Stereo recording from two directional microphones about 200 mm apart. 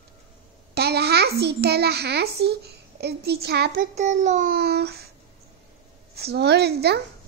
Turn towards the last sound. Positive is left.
turn(degrees=-55)  # may be behind; listen again after turning